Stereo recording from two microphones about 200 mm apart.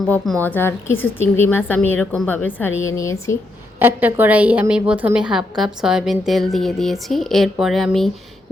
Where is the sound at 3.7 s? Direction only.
10° right (ahead or behind).